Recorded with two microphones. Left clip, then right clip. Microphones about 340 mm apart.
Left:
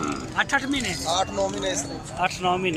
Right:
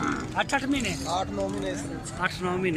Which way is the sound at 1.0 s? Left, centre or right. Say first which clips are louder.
Left 7 dB; left.